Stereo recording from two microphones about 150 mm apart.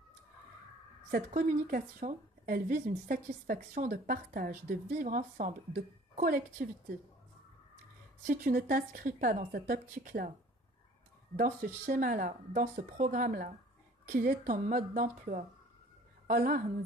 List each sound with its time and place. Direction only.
1.1 s speech: 60° right (ahead or behind)
8.3 s speech: 65° right (ahead or behind)
11.3 s a woman's voice: 50° right (ahead or behind); by 16.6 s 65° right (ahead or behind)